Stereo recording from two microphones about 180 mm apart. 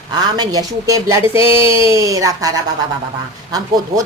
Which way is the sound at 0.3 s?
20° right (ahead or behind).